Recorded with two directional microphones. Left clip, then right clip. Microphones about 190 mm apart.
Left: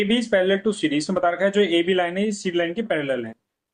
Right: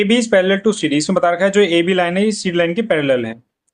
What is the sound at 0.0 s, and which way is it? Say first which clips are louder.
Speech: right 6 dB; 40° right (ahead or behind).